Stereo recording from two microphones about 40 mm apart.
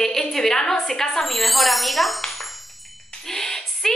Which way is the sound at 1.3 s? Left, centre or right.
Centre.